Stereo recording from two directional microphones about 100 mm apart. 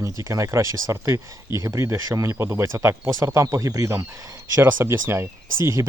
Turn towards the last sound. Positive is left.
turn(degrees=-30)  # may be behind; listen again after turning